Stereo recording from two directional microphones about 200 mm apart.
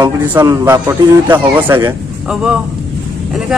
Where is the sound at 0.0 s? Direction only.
10° right (ahead or behind).